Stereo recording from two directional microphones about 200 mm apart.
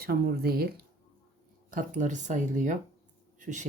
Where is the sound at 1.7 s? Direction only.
40° right (ahead or behind).